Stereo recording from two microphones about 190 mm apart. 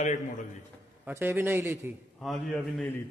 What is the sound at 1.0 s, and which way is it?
Speech, 15° right (ahead or behind).